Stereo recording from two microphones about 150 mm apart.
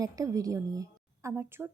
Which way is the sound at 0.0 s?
25° right (ahead or behind).